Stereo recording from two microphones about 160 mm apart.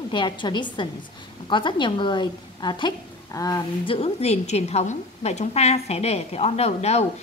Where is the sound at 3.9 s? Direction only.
40° left (ahead or behind).